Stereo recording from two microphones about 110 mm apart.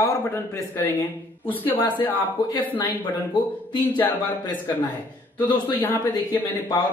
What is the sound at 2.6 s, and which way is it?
Speech, 15° left (ahead or behind).